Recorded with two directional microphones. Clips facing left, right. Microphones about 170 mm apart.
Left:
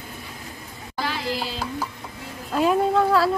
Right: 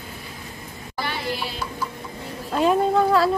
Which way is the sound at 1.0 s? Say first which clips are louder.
Left 1 dB; 90° left.